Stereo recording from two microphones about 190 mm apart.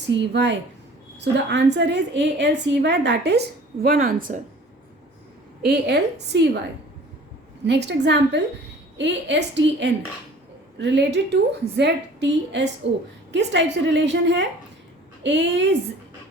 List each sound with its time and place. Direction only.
0.2 s a woman's voice: 65° right (ahead or behind)
3.8 s speech: 50° right (ahead or behind)
5.6 s a woman's voice: 60° right (ahead or behind)
7.6 s a woman's voice: 65° right (ahead or behind)